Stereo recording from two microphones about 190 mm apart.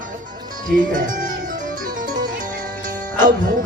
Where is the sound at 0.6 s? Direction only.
45° right (ahead or behind).